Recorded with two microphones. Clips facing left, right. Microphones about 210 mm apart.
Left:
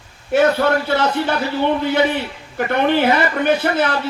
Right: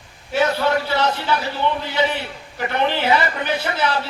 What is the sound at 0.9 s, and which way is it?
A man's voice, 55° left (ahead or behind).